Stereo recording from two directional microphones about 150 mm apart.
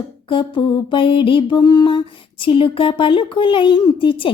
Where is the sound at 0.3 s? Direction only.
35° left (ahead or behind).